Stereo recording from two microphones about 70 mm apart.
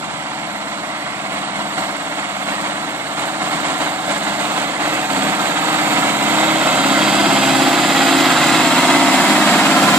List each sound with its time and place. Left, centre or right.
3.7 s vehicle: right; by 9.9 s centre